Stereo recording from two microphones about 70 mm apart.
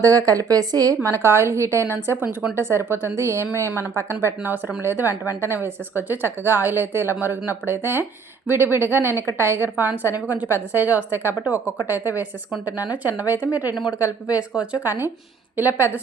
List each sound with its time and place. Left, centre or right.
0.0 s a woman's voice: right
1.0 s a woman's voice: right; by 14.8 s centre
14.8 s a woman's voice: right